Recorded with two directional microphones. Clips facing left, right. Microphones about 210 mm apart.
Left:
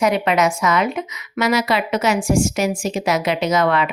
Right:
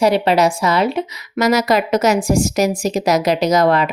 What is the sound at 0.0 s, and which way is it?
A woman's voice, 35° right (ahead or behind).